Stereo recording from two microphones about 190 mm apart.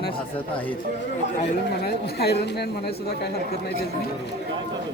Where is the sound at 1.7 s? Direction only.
60° left (ahead or behind).